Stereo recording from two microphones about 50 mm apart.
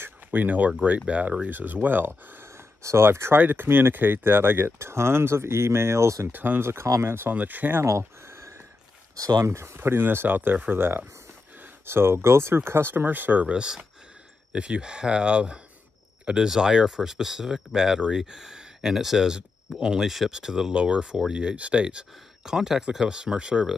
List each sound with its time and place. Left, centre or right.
0.0 s speech: right
1.5 s speech: right
2.4 s speech: right
6.2 s speech: right
6.6 s speech: right
7.3 s speech: right
8.3 s a sound: right
9.2 s speech: right
9.5 s speech: right
9.8 s speech: right; by 23.7 s centre